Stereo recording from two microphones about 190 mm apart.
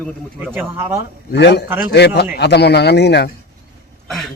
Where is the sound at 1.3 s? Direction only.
65° left (ahead or behind).